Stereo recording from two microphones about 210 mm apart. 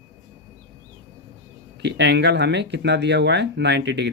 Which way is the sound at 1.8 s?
55° right (ahead or behind).